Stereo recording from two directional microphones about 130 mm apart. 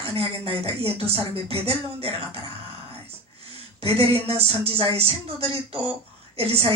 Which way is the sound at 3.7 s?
50° right (ahead or behind).